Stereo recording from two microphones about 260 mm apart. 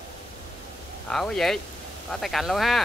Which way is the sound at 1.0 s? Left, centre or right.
Centre.